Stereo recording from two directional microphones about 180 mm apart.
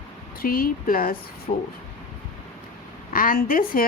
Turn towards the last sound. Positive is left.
turn(degrees=50)  # may be behind; listen again after turning